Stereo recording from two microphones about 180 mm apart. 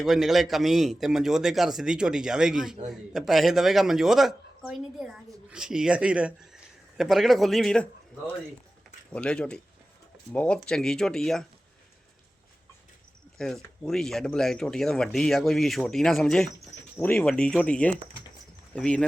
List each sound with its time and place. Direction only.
0.0 s speech: centre (ahead or behind)
9.1 s speech: 5° left (ahead or behind)
13.4 s speech: 5° left (ahead or behind)